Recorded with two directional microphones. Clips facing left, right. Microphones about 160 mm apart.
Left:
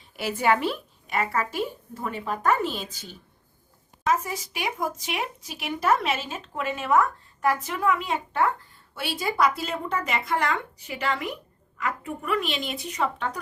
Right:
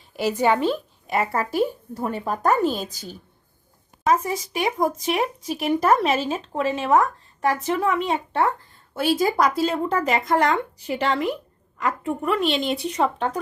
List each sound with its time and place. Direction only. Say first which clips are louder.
1.1 s speech: right 4 dB; 35° right (ahead or behind)
4.2 s speech: right 7 dB; 30° right (ahead or behind)
9.0 s speech: right 5 dB; 45° right (ahead or behind)